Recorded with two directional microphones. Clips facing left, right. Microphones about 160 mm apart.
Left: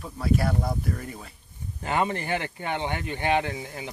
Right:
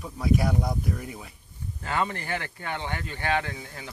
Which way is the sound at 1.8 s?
20° left (ahead or behind).